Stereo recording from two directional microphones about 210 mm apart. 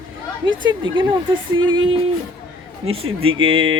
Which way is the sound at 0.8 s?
25° right (ahead or behind).